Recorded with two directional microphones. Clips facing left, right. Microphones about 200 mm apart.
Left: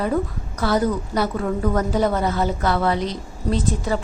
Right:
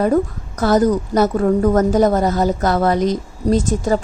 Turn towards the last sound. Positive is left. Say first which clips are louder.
# right 6 dB
turn(degrees=-45)  # may be behind; listen again after turning